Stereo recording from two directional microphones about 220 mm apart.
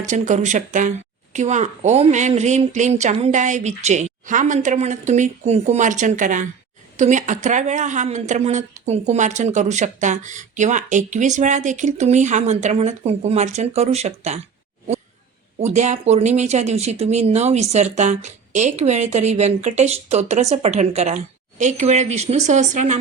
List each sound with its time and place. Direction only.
0.1 s a woman's voice: 35° right (ahead or behind)
15.6 s a woman's voice: 30° right (ahead or behind)